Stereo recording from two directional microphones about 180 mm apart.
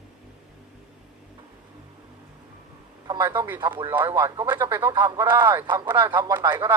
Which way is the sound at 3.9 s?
10° right (ahead or behind).